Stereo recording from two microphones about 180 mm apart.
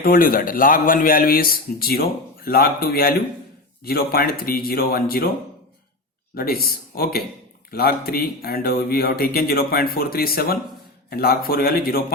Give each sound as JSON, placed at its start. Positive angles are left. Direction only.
{"t": 0.0, "sound": "a man's voice", "side_deg": 50}
{"t": 6.3, "sound": "speech", "side_deg": 55}